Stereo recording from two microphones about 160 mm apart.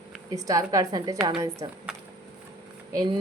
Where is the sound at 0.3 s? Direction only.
20° right (ahead or behind).